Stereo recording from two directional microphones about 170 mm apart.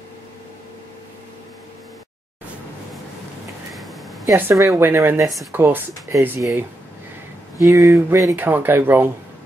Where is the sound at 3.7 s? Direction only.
Centre (ahead or behind).